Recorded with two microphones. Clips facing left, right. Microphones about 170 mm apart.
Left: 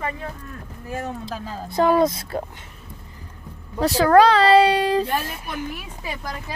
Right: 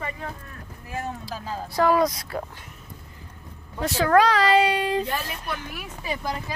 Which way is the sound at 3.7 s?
35° left (ahead or behind).